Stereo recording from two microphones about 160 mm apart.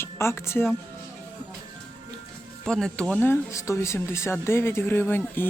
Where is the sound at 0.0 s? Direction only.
15° left (ahead or behind).